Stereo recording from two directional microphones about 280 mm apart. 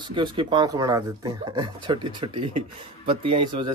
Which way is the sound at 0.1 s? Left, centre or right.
Centre.